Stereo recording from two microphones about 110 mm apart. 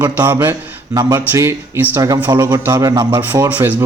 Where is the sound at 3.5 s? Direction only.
15° right (ahead or behind).